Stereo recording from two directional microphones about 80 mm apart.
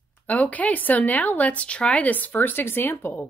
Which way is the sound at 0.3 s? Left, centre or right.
Centre.